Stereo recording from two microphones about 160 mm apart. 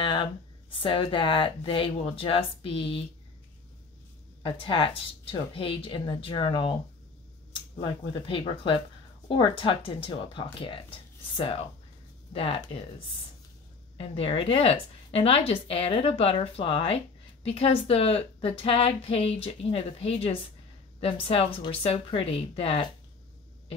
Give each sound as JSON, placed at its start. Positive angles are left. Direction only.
{"t": 0.0, "sound": "a woman's voice", "side_deg": 30}
{"t": 4.4, "sound": "a woman's voice", "side_deg": 35}
{"t": 7.8, "sound": "a woman's voice", "side_deg": 30}
{"t": 13.9, "sound": "a woman's voice", "side_deg": 35}